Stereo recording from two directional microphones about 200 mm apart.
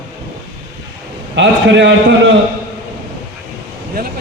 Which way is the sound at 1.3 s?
65° right (ahead or behind).